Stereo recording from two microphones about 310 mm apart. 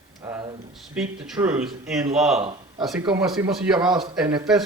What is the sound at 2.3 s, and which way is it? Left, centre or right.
Speech, centre.